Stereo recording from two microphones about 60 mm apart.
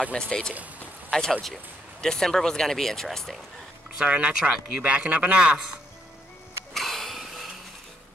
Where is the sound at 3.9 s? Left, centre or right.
Right.